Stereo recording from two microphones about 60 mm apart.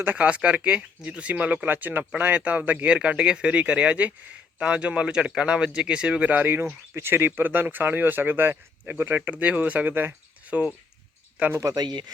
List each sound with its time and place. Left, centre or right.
0.0 s speech: right
6.9 s speech: right
11.7 s speech: right